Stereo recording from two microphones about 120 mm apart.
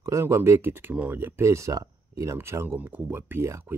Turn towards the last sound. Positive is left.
turn(degrees=-20)  # may be behind; listen again after turning